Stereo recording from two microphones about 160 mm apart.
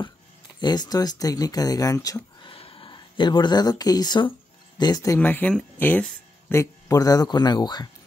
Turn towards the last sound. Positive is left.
turn(degrees=25)  # may be behind; listen again after turning